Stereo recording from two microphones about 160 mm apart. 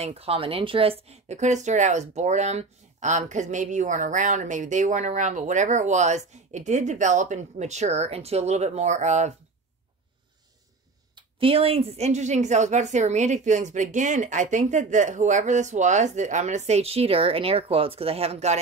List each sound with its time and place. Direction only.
0.0 s speech: 40° right (ahead or behind)
11.1 s speech: 35° right (ahead or behind)